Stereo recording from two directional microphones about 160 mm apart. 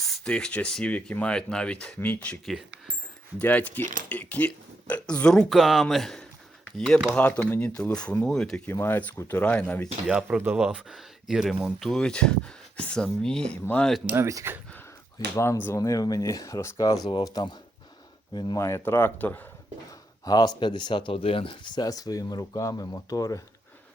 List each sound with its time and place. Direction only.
0.3 s speech: 5° left (ahead or behind)
8.7 s speech: 15° left (ahead or behind)
10.1 s speech: 5° right (ahead or behind)
14.1 s speech: 15° right (ahead or behind)
15.6 s speech: 20° left (ahead or behind)
20.2 s speech: 25° left (ahead or behind)